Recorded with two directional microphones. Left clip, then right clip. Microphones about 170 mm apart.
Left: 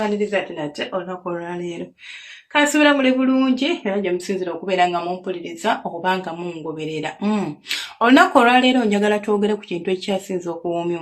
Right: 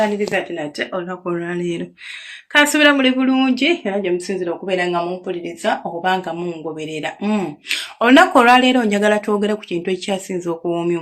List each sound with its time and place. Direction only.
0.5 s speech: 20° right (ahead or behind)